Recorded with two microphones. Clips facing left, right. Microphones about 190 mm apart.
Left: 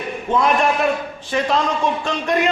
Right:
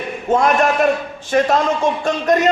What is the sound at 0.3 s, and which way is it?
A man's voice, 45° right (ahead or behind).